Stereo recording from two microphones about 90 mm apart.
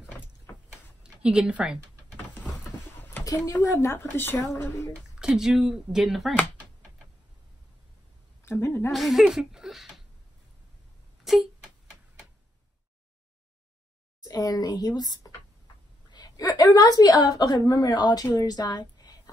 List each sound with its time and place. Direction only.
1.0 s speech: 10° right (ahead or behind)
3.4 s speech: 35° left (ahead or behind)
5.2 s speech: 10° right (ahead or behind)
8.5 s a woman's voice: 30° left (ahead or behind)
8.9 s speech: centre (ahead or behind)
11.3 s speech: centre (ahead or behind)
14.2 s a woman's voice: 45° left (ahead or behind)